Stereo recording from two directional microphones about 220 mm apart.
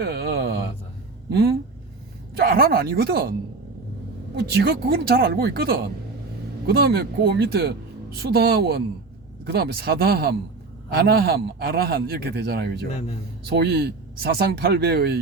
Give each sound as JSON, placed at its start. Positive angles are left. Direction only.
{"t": 0.0, "sound": "a sound", "side_deg": -50}
{"t": 1.3, "sound": "a man's voice", "side_deg": -45}
{"t": 4.6, "sound": "a man's voice", "side_deg": -45}